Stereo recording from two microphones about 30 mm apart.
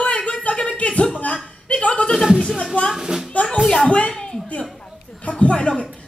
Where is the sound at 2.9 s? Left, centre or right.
Centre.